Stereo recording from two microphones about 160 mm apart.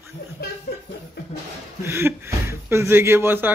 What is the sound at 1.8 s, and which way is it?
A man's voice, 15° right (ahead or behind).